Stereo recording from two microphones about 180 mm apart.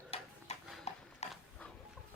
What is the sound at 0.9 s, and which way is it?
Horse, 35° left (ahead or behind).